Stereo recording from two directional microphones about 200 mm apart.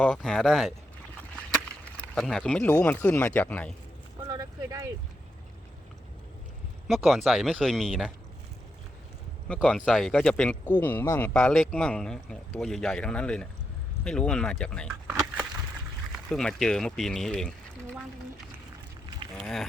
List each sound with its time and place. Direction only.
0.0 s speech: 5° left (ahead or behind)
1.4 s a sound: centre (ahead or behind)
2.1 s speech: 5° left (ahead or behind)
4.2 s speech: 20° right (ahead or behind)
6.8 s speech: centre (ahead or behind)
9.5 s speech: 5° left (ahead or behind)
16.1 s speech: 5° left (ahead or behind)
19.4 s speech: centre (ahead or behind)